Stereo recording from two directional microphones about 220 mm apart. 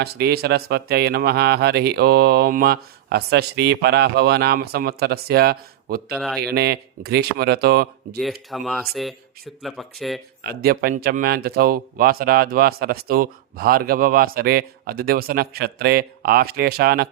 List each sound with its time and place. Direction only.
0.0 s speech: 45° right (ahead or behind)
6.1 s speech: centre (ahead or behind)
6.4 s speech: 45° right (ahead or behind)
8.2 s speech: centre (ahead or behind)
10.4 s speech: 45° right (ahead or behind)